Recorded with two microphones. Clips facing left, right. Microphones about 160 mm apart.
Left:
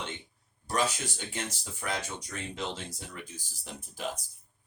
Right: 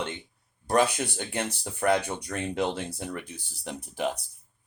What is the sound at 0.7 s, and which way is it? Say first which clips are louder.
Speech: right 7 dB; 60° right (ahead or behind).